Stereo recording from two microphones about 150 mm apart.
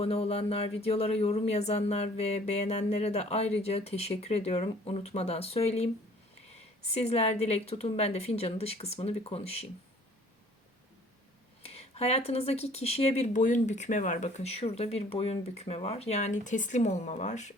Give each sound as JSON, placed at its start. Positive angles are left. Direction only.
{"t": 0.0, "sound": "speech", "side_deg": 45}
{"t": 6.9, "sound": "speech", "side_deg": 45}
{"t": 11.6, "sound": "speech", "side_deg": 45}